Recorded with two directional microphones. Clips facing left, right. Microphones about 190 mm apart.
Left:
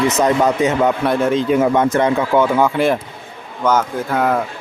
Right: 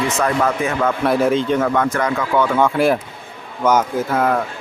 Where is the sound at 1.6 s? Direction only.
20° left (ahead or behind).